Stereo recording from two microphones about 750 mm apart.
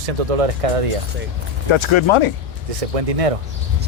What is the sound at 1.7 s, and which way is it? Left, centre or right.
Speech, left.